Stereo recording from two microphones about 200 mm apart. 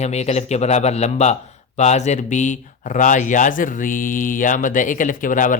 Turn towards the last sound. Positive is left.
turn(degrees=40)  # may be behind; listen again after turning